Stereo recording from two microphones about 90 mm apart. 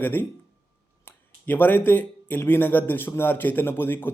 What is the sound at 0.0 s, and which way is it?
Speech, 20° left (ahead or behind).